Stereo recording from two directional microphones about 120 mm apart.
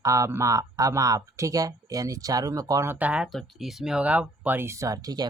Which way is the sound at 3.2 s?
Centre (ahead or behind).